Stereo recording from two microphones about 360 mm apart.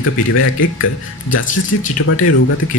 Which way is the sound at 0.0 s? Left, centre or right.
Left.